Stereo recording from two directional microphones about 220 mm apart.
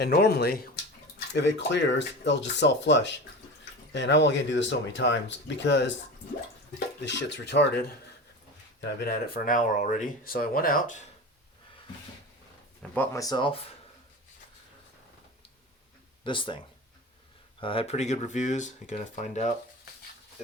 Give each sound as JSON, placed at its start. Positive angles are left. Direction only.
{"t": 0.0, "sound": "speech", "side_deg": 45}
{"t": 12.9, "sound": "speech", "side_deg": 10}
{"t": 16.2, "sound": "speech", "side_deg": 20}
{"t": 17.6, "sound": "speech", "side_deg": 25}